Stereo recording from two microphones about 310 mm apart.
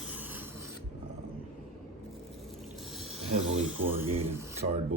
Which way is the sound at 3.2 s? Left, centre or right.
Right.